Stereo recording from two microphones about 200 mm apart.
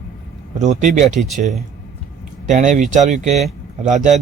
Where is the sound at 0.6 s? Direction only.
35° right (ahead or behind).